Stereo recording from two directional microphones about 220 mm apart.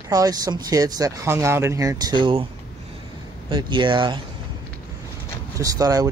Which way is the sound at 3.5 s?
20° right (ahead or behind).